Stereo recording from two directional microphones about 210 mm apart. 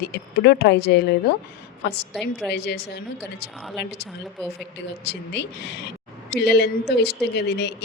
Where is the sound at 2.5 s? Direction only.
55° left (ahead or behind).